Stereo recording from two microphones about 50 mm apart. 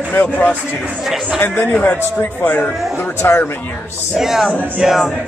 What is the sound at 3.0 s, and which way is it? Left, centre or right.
Speech, left.